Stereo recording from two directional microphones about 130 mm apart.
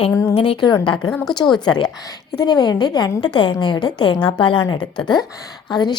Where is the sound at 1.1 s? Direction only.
5° left (ahead or behind).